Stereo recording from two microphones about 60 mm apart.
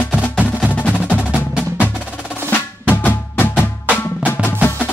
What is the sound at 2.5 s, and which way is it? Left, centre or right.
Drum, left.